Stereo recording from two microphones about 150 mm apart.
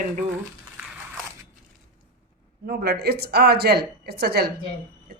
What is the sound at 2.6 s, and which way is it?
A woman's voice, 90° right.